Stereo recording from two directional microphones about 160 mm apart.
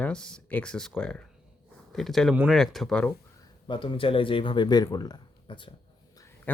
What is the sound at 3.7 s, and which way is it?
Speech, 30° left (ahead or behind).